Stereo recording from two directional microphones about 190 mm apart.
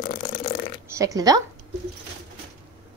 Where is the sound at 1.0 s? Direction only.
20° right (ahead or behind).